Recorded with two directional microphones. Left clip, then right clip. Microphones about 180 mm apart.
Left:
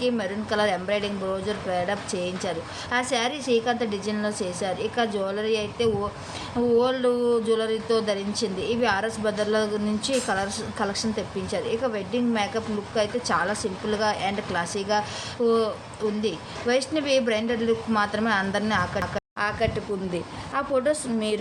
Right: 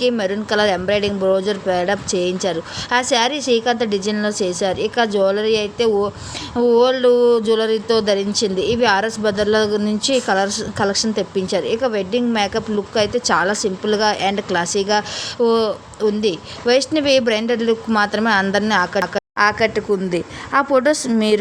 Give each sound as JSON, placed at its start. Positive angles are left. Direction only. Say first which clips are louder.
{"t": 0.0, "sound": "speech", "louder": "right 8 dB", "side_deg": -50}